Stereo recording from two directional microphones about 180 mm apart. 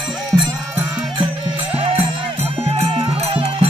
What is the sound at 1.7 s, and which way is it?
Music, 30° right (ahead or behind).